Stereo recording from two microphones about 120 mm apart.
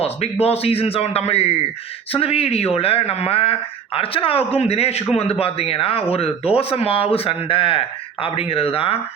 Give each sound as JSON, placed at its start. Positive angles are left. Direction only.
{"t": 0.0, "sound": "a man's voice", "side_deg": 55}